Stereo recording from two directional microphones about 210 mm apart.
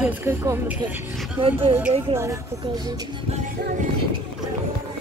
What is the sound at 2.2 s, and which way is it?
Speech, 15° right (ahead or behind).